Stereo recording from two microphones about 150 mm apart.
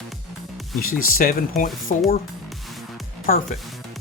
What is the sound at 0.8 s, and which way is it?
Speech, 75° left (ahead or behind).